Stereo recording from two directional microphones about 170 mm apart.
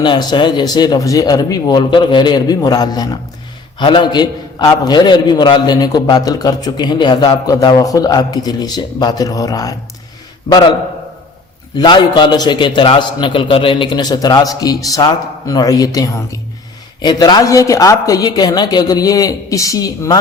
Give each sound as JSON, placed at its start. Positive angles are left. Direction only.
{"t": 0.0, "sound": "a man's voice", "side_deg": 25}
{"t": 11.8, "sound": "a man's voice", "side_deg": 25}